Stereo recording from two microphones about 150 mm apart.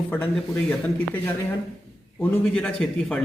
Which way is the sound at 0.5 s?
15° left (ahead or behind).